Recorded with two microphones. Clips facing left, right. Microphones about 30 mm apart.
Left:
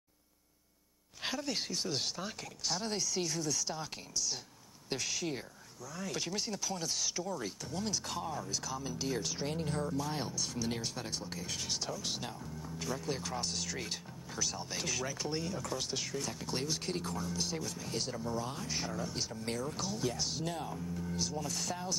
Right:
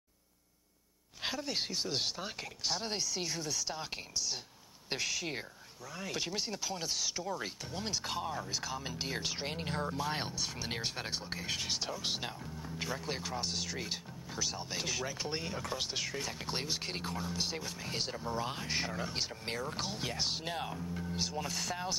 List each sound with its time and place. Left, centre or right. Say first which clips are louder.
1.2 s speech: even; centre; by 10.3 s right
10.3 s speech: left 1 dB; right
13.4 s speech: right 1 dB; centre